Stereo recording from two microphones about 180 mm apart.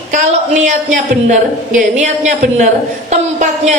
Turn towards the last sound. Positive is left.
turn(degrees=-40)  # may be behind; listen again after turning